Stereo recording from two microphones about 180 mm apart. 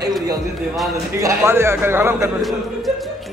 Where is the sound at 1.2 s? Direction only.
15° right (ahead or behind).